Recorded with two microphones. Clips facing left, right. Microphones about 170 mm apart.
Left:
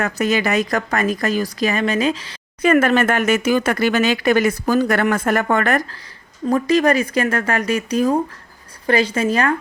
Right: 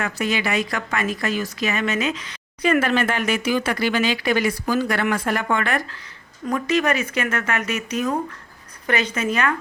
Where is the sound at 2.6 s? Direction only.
50° left (ahead or behind); by 9.6 s 35° left (ahead or behind).